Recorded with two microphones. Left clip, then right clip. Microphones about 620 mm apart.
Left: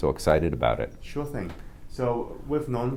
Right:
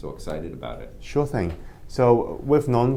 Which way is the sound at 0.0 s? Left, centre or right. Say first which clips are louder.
Left 10 dB; left.